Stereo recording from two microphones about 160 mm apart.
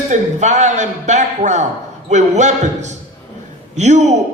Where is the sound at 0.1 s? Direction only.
45° right (ahead or behind).